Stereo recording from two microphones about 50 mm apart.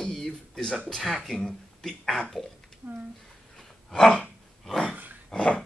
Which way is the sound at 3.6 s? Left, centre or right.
Centre.